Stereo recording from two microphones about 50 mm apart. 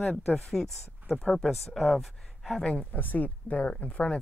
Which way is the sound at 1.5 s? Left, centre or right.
Centre.